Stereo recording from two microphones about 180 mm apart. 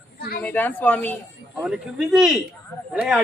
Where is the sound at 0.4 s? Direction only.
10° left (ahead or behind).